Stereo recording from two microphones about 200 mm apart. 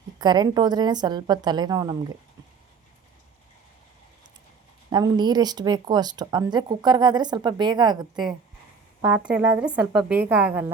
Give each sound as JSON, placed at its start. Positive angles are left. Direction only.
{"t": 0.2, "sound": "speech", "side_deg": -20}
{"t": 4.9, "sound": "speech", "side_deg": -20}
{"t": 9.0, "sound": "a woman's voice", "side_deg": -10}